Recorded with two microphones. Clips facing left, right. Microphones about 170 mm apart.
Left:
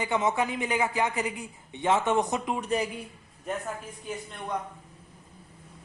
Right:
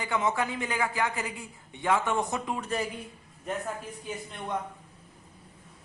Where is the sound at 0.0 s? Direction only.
20° left (ahead or behind).